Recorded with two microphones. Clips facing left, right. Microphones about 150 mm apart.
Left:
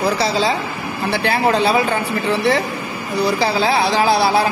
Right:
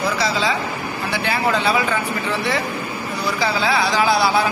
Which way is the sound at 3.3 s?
30° left (ahead or behind).